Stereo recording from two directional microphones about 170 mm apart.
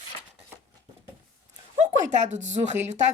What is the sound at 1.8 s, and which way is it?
Speech, 45° right (ahead or behind).